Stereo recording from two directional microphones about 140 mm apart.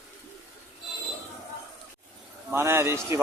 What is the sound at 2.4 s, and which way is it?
Speech, 15° right (ahead or behind).